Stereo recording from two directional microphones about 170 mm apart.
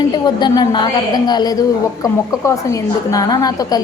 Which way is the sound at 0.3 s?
25° left (ahead or behind).